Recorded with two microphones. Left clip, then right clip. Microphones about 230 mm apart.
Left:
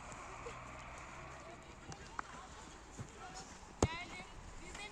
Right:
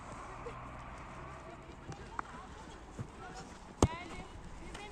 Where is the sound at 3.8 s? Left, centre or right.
Right.